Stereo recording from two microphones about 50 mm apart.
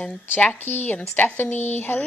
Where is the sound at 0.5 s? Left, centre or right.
Left.